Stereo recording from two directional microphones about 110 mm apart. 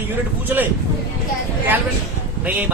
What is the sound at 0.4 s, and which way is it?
Speech, 15° right (ahead or behind).